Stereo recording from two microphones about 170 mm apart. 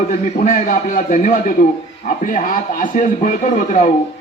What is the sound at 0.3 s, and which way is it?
A man's voice, 50° left (ahead or behind).